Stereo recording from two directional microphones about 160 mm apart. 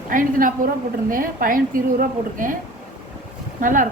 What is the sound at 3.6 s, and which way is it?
Speech, 55° right (ahead or behind).